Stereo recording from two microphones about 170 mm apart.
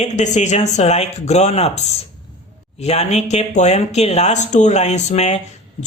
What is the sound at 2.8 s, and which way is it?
Speech, 40° left (ahead or behind).